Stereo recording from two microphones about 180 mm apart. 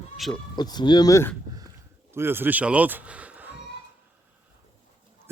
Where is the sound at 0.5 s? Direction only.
25° left (ahead or behind).